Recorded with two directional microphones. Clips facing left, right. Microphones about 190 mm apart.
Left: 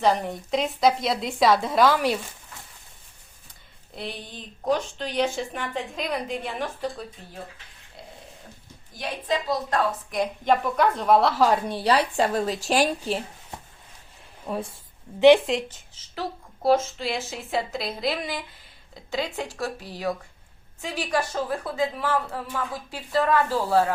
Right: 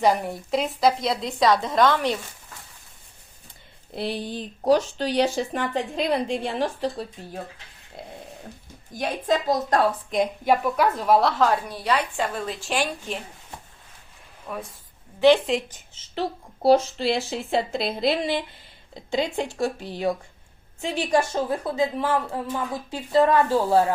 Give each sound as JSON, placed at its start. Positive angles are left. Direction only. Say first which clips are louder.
{"t": 0.0, "sound": "a woman's voice", "louder": "right 1 dB", "side_deg": -10}
{"t": 3.9, "sound": "speech", "louder": "right 7 dB", "side_deg": -35}
{"t": 9.0, "sound": "a woman's voice", "louder": "right 4 dB", "side_deg": -45}
{"t": 10.4, "sound": "a woman's voice", "louder": "left 1 dB", "side_deg": -10}
{"t": 11.6, "sound": "a woman's voice", "louder": "left 3 dB", "side_deg": 30}
{"t": 14.4, "sound": "speech", "louder": "left 4 dB", "side_deg": 30}
{"t": 15.5, "sound": "a woman's voice", "louder": "right 1 dB", "side_deg": 0}
{"t": 16.6, "sound": "speech", "louder": "right 3 dB", "side_deg": -30}